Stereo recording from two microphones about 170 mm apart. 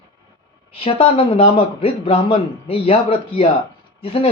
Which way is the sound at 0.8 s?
35° left (ahead or behind).